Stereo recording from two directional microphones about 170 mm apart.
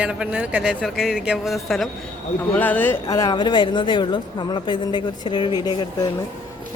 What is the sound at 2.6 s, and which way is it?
A woman's voice, 10° left (ahead or behind).